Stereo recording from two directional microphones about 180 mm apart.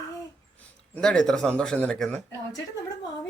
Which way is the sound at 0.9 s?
5° left (ahead or behind).